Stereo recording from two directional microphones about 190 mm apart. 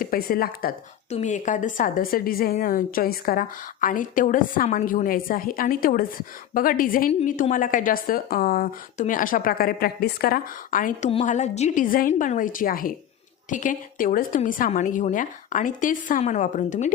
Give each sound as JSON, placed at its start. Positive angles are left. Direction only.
{"t": 0.0, "sound": "a woman's voice", "side_deg": 50}
{"t": 1.1, "sound": "a woman's voice", "side_deg": 40}